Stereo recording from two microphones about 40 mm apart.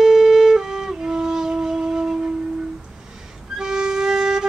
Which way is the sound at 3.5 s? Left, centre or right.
Centre.